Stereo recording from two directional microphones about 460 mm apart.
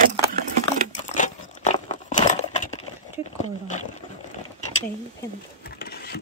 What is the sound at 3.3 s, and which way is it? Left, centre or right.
Speech, centre.